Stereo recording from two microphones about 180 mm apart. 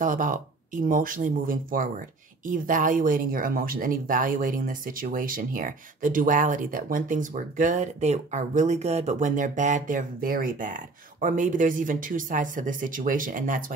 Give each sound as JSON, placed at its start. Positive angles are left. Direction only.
{"t": 0.0, "sound": "speech", "side_deg": -45}